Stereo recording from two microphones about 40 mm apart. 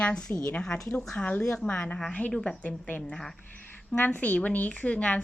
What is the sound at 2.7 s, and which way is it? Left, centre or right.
A woman's voice, left.